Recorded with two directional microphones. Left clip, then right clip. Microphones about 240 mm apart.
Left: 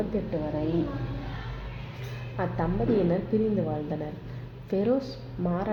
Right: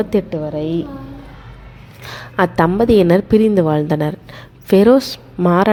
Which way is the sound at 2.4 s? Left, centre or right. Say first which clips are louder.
Right 16 dB; right.